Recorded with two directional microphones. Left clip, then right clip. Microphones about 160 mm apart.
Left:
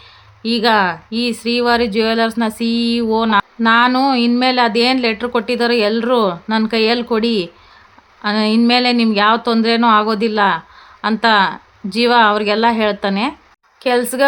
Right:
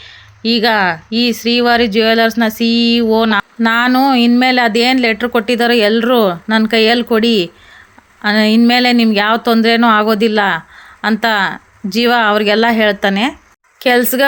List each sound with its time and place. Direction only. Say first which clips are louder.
0.0 s speech: right 6 dB; 15° right (ahead or behind)